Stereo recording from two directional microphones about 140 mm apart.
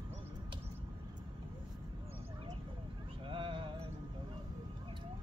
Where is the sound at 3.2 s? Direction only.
35° right (ahead or behind).